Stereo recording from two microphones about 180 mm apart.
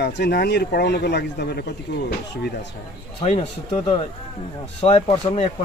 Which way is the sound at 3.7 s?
25° left (ahead or behind).